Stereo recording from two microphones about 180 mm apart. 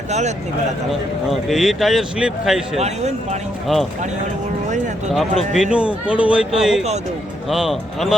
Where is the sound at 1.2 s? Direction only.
Centre (ahead or behind).